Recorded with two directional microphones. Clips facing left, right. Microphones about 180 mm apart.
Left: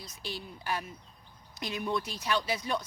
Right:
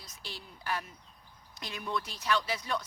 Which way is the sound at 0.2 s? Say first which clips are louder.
Left 6 dB; 15° left (ahead or behind).